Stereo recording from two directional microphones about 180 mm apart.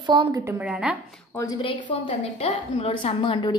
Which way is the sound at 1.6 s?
25° left (ahead or behind).